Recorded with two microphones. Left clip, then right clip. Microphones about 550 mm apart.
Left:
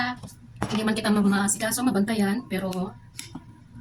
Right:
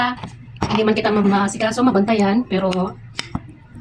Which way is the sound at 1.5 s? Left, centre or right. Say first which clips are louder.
Right 9 dB; left.